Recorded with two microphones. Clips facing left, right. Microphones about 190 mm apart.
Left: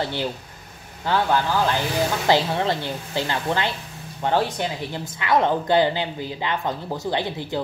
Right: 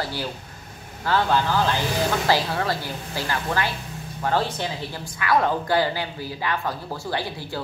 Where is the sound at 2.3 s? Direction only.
20° left (ahead or behind).